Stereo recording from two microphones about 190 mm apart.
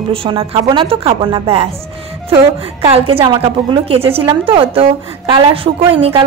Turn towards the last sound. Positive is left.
turn(degrees=-30)  # may be behind; listen again after turning